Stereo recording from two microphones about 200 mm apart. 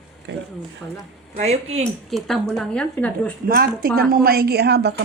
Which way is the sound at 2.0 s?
Centre (ahead or behind).